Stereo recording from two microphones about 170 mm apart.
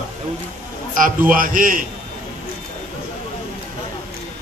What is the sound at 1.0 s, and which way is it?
Speech, 55° right (ahead or behind).